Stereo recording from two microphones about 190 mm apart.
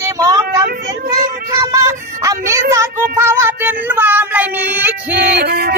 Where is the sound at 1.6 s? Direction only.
15° right (ahead or behind).